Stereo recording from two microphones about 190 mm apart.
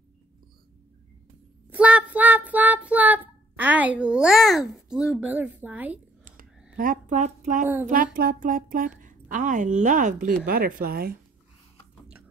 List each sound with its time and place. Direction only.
1.7 s child singing: 5° right (ahead or behind)
6.8 s a woman's voice: 40° right (ahead or behind)